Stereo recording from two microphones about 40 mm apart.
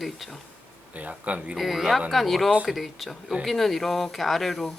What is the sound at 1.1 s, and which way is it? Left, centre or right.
Speech, right.